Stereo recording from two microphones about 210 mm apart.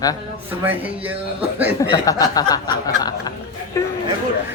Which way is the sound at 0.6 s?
10° right (ahead or behind).